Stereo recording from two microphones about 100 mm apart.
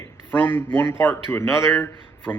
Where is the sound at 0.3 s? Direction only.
20° left (ahead or behind).